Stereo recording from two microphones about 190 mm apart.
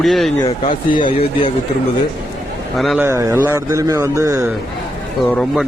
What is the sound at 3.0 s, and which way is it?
Speech, 15° right (ahead or behind).